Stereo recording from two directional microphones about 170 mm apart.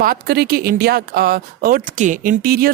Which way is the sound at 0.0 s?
65° right (ahead or behind).